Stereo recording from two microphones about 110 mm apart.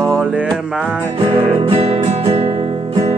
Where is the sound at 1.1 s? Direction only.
60° right (ahead or behind).